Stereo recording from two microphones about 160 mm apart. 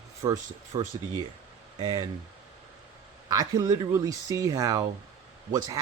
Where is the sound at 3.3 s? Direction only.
20° right (ahead or behind).